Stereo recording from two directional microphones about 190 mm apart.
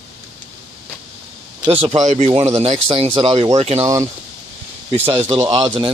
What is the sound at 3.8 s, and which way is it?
Speech, 15° right (ahead or behind).